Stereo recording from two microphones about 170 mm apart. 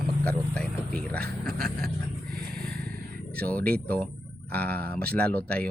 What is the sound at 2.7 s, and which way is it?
Vehicle, 65° right (ahead or behind).